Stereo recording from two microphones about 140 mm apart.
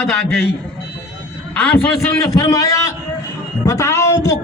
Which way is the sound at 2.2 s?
25° left (ahead or behind).